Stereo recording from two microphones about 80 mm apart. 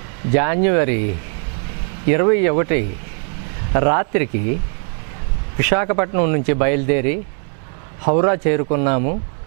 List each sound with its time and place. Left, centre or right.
0.3 s speech: centre
2.0 s speech: centre
5.6 s speech: centre